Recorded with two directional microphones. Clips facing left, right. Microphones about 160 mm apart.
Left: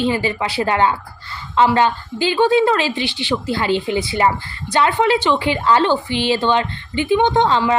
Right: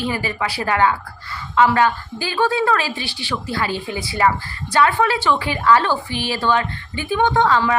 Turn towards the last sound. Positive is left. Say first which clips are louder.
# left 2 dB
turn(degrees=20)  # may be behind; listen again after turning